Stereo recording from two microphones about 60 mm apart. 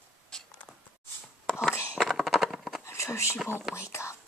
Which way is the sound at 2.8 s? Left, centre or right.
Left.